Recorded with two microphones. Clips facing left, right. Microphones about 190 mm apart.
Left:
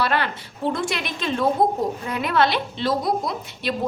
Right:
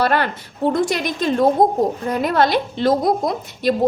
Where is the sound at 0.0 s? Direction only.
45° right (ahead or behind).